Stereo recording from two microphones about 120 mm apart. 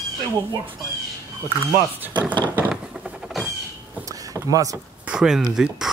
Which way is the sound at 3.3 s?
Centre (ahead or behind).